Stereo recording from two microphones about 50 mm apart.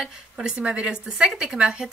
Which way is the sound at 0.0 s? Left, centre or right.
Centre.